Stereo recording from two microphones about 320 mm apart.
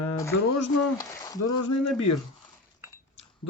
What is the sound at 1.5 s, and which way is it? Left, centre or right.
Speech, left.